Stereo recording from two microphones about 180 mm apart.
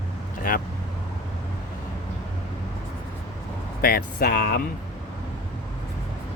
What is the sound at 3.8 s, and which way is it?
Speech, 55° left (ahead or behind).